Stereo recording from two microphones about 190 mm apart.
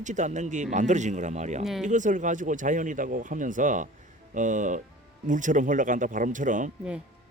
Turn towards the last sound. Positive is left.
turn(degrees=-45)  # may be behind; listen again after turning